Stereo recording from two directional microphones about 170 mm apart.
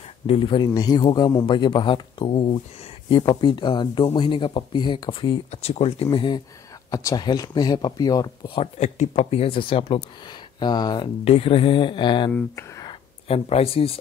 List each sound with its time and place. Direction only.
0.3 s a man's voice: 30° left (ahead or behind)
5.5 s a man's voice: 40° left (ahead or behind); by 8.6 s 25° left (ahead or behind)
8.7 s a man's voice: 45° left (ahead or behind)
12.3 s speech: 10° left (ahead or behind)
13.3 s speech: 35° left (ahead or behind)